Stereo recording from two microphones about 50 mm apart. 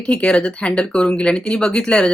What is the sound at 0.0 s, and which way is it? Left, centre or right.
Speech, centre.